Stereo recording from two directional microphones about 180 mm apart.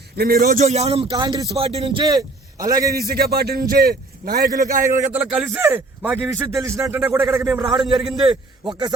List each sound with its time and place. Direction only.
0.2 s a man's voice: 55° right (ahead or behind)
0.6 s a man's voice: 35° right (ahead or behind); by 3.0 s 20° right (ahead or behind)
3.0 s a man's voice: 60° right (ahead or behind)
4.7 s a man's voice: 45° right (ahead or behind)
5.1 s a man's voice: 5° right (ahead or behind)
7.8 s a man's voice: centre (ahead or behind)
8.6 s a man's voice: 25° right (ahead or behind)